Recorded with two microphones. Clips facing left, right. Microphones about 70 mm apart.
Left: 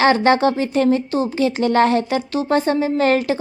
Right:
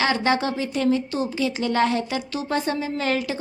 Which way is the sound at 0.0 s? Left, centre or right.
Left.